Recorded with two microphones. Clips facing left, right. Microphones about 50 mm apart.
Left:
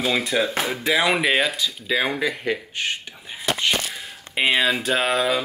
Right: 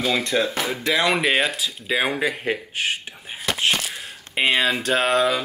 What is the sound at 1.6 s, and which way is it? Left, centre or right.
Speech, centre.